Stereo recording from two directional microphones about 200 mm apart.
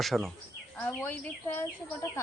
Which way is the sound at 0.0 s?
Centre (ahead or behind).